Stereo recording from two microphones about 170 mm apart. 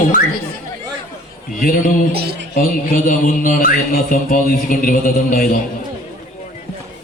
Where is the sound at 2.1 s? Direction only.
70° right (ahead or behind).